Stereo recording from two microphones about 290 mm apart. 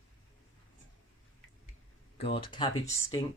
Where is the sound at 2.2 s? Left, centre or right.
Centre.